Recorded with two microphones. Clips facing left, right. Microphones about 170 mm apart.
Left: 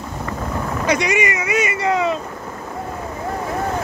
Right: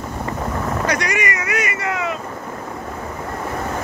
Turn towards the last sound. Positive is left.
turn(degrees=25)  # may be behind; listen again after turning